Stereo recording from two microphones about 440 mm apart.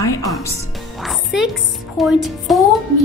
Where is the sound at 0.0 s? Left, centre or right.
Centre.